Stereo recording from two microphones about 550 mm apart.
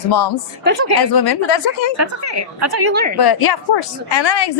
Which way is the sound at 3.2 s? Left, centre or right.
Left.